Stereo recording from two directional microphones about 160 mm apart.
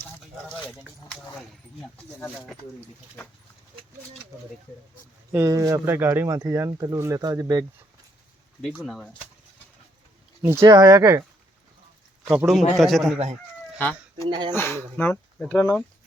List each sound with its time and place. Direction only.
2.0 s speech: 10° left (ahead or behind)
5.3 s speech: 20° right (ahead or behind)
8.6 s speech: centre (ahead or behind)
10.4 s speech: 15° right (ahead or behind)
12.2 s speech: 5° right (ahead or behind)
13.7 s chicken: 10° left (ahead or behind)
14.3 s speech: 30° right (ahead or behind)
14.5 s speech: 15° left (ahead or behind)